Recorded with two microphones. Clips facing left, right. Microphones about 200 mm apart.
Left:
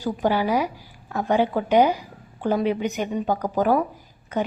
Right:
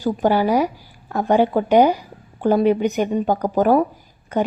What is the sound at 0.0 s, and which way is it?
A woman's voice, 50° right (ahead or behind).